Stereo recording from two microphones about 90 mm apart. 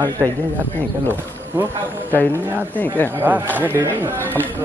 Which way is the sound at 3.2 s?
20° right (ahead or behind).